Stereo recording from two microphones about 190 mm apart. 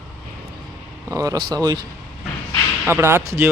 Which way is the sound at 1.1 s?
20° right (ahead or behind).